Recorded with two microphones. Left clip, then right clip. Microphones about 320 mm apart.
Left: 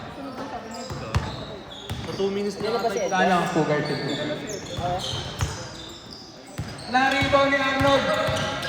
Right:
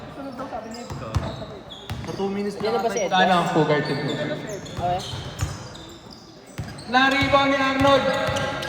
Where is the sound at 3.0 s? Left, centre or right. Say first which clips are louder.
Right 3 dB; right.